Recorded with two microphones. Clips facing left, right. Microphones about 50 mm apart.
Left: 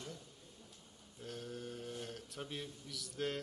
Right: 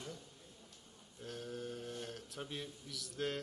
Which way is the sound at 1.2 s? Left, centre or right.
Centre.